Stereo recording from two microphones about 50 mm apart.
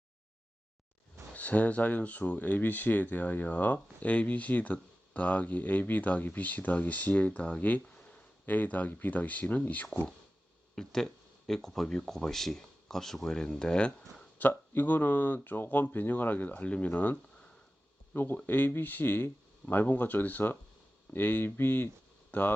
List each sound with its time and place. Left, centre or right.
1.3 s speech: left
10.8 s speech: centre
14.3 s speech: left
18.1 s speech: left